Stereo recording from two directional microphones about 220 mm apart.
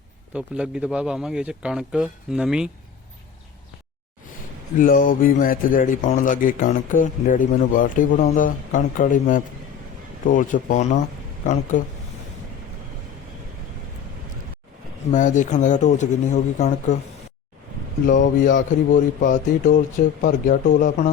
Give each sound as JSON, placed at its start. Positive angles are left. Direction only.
{"t": 0.3, "sound": "speech", "side_deg": -5}
{"t": 4.8, "sound": "speech", "side_deg": 40}
{"t": 15.1, "sound": "speech", "side_deg": 35}
{"t": 18.1, "sound": "speech", "side_deg": 35}